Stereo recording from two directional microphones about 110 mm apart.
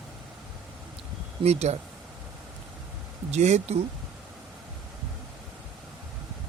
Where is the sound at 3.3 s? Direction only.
85° right.